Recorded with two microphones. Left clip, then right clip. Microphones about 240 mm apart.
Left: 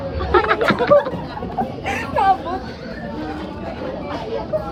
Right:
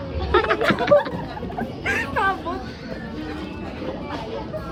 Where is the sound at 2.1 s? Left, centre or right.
Centre.